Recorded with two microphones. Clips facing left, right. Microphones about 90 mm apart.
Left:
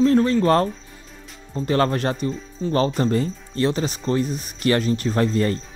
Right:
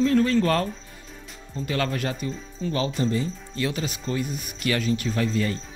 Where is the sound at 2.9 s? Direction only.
50° left (ahead or behind).